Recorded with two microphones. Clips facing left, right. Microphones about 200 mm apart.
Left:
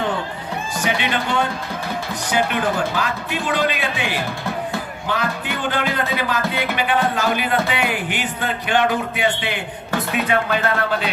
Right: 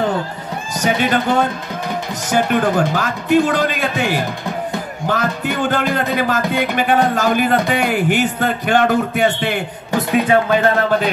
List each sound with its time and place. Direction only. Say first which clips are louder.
0.7 s a man's voice: right 6 dB; 45° right (ahead or behind)